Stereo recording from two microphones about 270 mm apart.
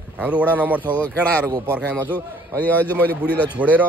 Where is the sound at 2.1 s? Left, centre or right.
Centre.